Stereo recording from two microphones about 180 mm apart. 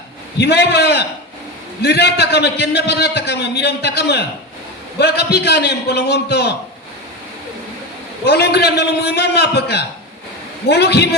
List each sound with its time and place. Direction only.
0.3 s a man's voice: 65° left (ahead or behind)
8.2 s a man's voice: 65° left (ahead or behind)